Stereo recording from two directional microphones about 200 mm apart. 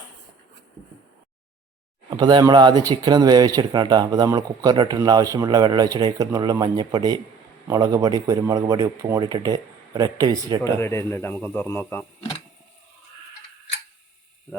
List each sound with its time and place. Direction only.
2.0 s speech: 20° right (ahead or behind)
10.6 s speech: 15° left (ahead or behind)